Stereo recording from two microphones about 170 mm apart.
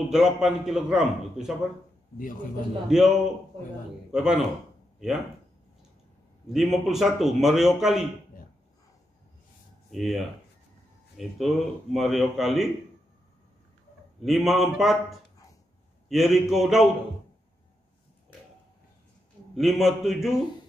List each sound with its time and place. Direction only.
0.1 s a man's voice: centre (ahead or behind)
2.1 s a man's voice: 55° left (ahead or behind)
2.9 s a man's voice: centre (ahead or behind)
4.1 s a man's voice: 5° right (ahead or behind)
6.5 s a man's voice: centre (ahead or behind)
9.8 s a man's voice: centre (ahead or behind)
14.2 s a man's voice: centre (ahead or behind)
19.5 s a man's voice: centre (ahead or behind)